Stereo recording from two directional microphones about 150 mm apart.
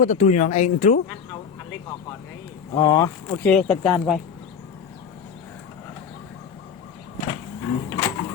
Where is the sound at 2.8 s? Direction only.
20° left (ahead or behind).